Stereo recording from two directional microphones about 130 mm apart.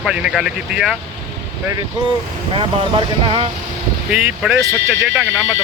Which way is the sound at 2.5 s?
40° right (ahead or behind).